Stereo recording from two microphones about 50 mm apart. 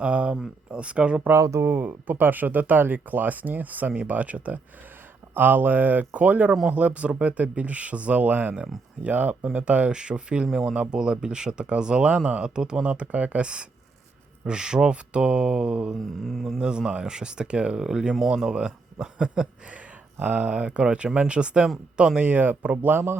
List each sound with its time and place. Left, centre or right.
0.0 s speech: right
1.4 s speech: right
1.6 s speech: right
5.3 s speech: right; by 16.0 s centre
16.0 s a sound: centre
16.6 s speech: centre; by 22.9 s right
22.9 s speech: right